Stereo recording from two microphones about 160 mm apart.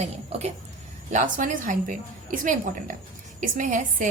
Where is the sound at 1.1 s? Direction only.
55° right (ahead or behind).